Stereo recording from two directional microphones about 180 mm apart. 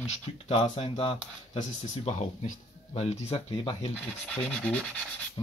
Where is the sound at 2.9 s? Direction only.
35° left (ahead or behind).